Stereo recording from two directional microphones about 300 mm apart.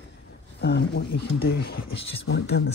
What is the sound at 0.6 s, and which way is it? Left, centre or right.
Speech, left.